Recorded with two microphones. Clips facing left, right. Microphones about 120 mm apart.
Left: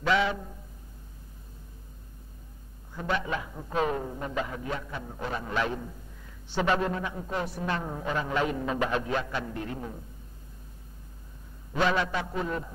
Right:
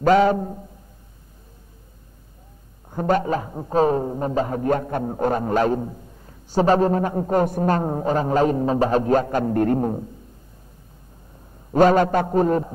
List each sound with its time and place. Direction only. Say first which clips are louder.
0.0 s a man's voice: right 10 dB; 45° right (ahead or behind)
2.9 s a man's voice: right 10 dB; 45° right (ahead or behind)
11.7 s a man's voice: right 11 dB; 45° right (ahead or behind)